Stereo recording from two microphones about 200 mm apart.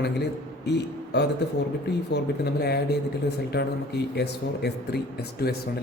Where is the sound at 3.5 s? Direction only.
55° left (ahead or behind).